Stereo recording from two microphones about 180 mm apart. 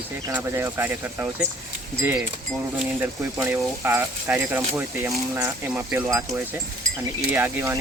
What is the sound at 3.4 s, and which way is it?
Speech, 10° right (ahead or behind).